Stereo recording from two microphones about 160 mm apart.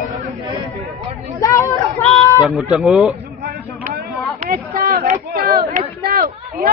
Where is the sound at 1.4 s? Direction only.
20° left (ahead or behind).